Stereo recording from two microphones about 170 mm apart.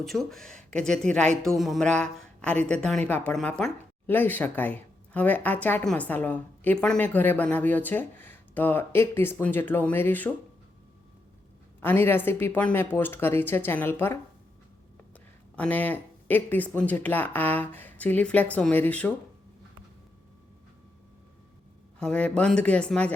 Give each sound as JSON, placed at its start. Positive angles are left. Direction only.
{"t": 0.0, "sound": "speech", "side_deg": 0}
{"t": 11.8, "sound": "speech", "side_deg": 10}
{"t": 15.5, "sound": "speech", "side_deg": 10}
{"t": 21.9, "sound": "speech", "side_deg": 5}